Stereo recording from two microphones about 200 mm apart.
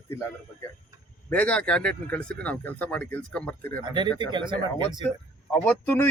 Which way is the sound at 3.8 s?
20° right (ahead or behind).